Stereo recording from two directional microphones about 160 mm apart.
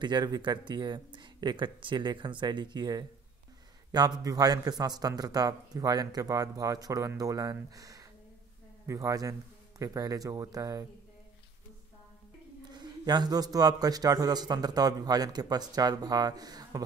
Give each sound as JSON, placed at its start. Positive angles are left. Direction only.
{"t": 0.0, "sound": "a man's voice", "side_deg": -25}
{"t": 12.7, "sound": "a man's voice", "side_deg": -25}